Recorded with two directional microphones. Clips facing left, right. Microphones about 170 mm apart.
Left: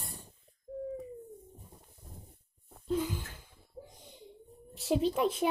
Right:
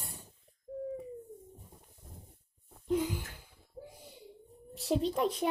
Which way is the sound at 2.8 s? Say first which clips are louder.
Right 1 dB; 15° right (ahead or behind).